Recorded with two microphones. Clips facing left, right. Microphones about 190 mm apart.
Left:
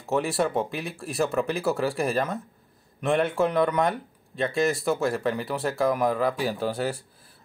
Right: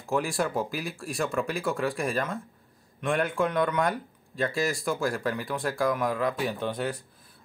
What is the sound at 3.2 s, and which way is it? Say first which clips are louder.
Speech: left 3 dB; 30° left (ahead or behind).